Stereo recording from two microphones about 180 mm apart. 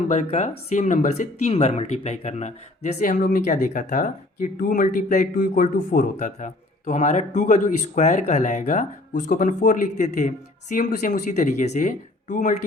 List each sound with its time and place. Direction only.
0.1 s speech: 40° left (ahead or behind)